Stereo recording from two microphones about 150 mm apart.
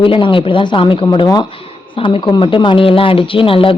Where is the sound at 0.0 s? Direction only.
35° left (ahead or behind).